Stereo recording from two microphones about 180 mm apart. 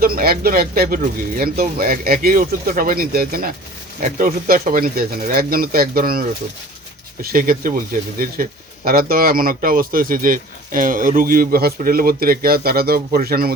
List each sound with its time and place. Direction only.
0.0 s speech: 55° right (ahead or behind)